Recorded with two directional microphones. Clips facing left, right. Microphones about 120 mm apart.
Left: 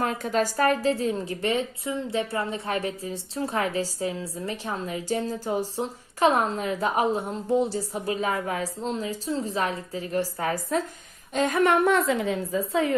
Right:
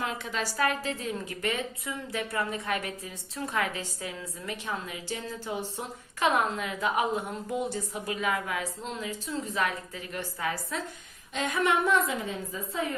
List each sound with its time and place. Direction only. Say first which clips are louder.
0.0 s a woman's voice: left 8 dB; 45° left (ahead or behind)
11.9 s a woman's voice: left 5 dB; 80° left